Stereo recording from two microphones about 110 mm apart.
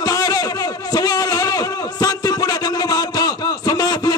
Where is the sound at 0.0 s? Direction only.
35° left (ahead or behind).